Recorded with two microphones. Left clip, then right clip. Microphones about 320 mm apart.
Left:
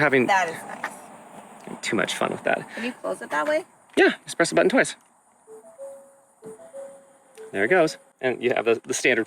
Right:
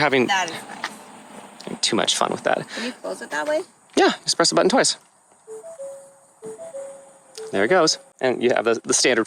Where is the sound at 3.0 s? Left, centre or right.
Left.